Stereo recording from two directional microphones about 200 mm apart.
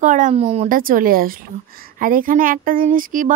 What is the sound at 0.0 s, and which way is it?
Speech, 40° right (ahead or behind).